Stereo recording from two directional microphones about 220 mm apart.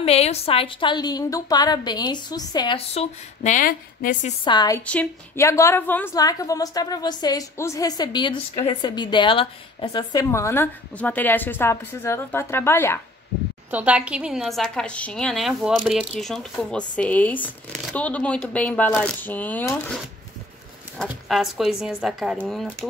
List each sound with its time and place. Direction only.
0.0 s a woman's voice: 25° left (ahead or behind)
4.5 s a woman's voice: 15° left (ahead or behind)
13.7 s speech: 5° right (ahead or behind); by 20.0 s 10° left (ahead or behind)
21.0 s speech: centre (ahead or behind)